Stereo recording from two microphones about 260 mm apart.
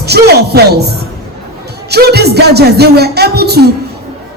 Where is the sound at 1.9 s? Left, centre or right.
Right.